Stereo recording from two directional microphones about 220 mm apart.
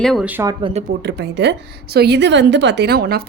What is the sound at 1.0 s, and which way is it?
A woman's voice, 50° right (ahead or behind).